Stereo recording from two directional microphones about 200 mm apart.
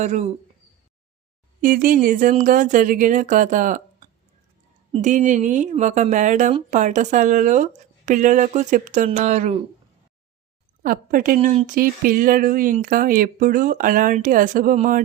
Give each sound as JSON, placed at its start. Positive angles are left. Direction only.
{"t": 0.0, "sound": "speech", "side_deg": -35}
{"t": 1.6, "sound": "speech", "side_deg": -45}
{"t": 4.9, "sound": "speech", "side_deg": -35}
{"t": 10.8, "sound": "speech", "side_deg": -45}